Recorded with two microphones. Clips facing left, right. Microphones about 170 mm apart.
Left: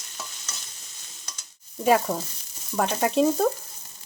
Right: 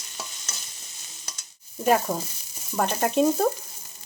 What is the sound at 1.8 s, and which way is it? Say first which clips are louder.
Speech: left 1 dB; centre (ahead or behind).